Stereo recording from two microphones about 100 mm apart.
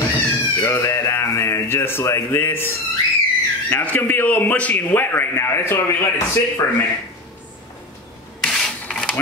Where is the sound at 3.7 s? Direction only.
20° left (ahead or behind).